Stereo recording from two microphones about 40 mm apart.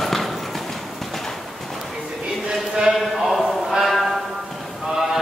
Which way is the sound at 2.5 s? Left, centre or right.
Centre.